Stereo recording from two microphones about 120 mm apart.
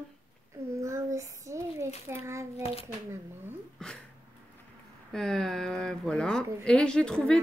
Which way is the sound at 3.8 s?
5° left (ahead or behind).